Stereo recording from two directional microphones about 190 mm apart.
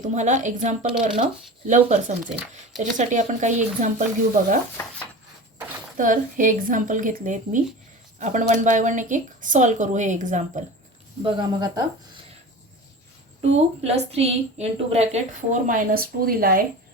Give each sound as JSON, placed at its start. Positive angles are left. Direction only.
{"t": 0.0, "sound": "a woman's voice", "side_deg": -40}
{"t": 2.2, "sound": "speech", "side_deg": -5}
{"t": 3.0, "sound": "a woman's voice", "side_deg": -40}
{"t": 6.0, "sound": "a woman's voice", "side_deg": -45}
{"t": 11.2, "sound": "speech", "side_deg": -25}
{"t": 13.4, "sound": "a woman's voice", "side_deg": -35}